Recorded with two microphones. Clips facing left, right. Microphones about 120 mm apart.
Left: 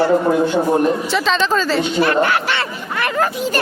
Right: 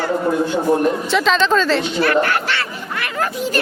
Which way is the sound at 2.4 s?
20° left (ahead or behind).